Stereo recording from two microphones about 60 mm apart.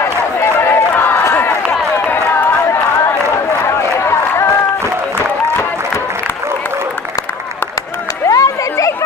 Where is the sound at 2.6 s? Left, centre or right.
Left.